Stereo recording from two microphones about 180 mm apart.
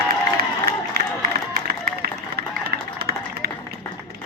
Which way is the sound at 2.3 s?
60° right (ahead or behind).